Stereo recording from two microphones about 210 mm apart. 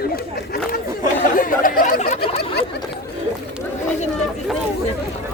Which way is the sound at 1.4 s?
40° left (ahead or behind).